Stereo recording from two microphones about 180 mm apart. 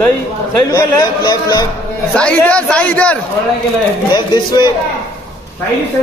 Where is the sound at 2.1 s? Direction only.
5° left (ahead or behind).